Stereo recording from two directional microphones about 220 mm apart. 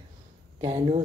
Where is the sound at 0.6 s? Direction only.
25° right (ahead or behind).